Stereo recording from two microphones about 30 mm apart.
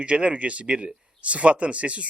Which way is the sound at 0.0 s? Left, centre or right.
Right.